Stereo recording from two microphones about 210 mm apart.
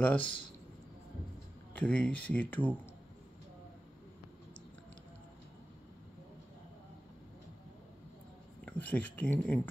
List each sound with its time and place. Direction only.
0.0 s speech: 5° left (ahead or behind)
1.8 s speech: 5° left (ahead or behind)
8.6 s speech: 5° left (ahead or behind)